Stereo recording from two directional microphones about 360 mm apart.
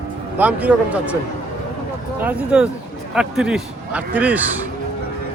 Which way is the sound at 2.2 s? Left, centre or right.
Centre.